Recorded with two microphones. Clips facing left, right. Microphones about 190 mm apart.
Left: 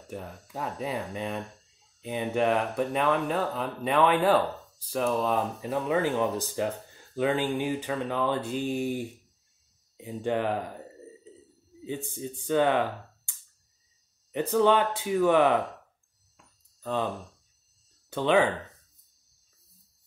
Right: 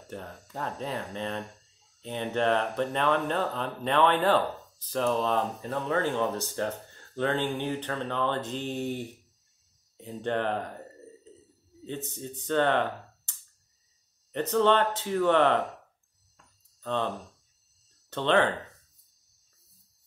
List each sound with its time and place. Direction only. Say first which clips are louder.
0.1 s speech: left 1 dB; 5° left (ahead or behind)
16.3 s a sound: left 2 dB; 10° left (ahead or behind)
18.1 s speech: left 1 dB; 10° left (ahead or behind)